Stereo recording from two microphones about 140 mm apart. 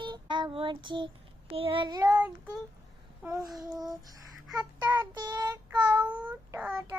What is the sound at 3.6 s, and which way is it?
Child singing, 25° right (ahead or behind).